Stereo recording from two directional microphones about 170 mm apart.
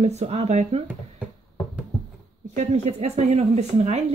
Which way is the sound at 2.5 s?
40° right (ahead or behind).